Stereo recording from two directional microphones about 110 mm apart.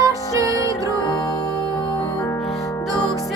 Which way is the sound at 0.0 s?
30° right (ahead or behind).